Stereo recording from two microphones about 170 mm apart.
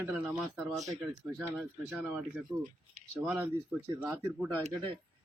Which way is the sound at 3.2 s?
10° right (ahead or behind).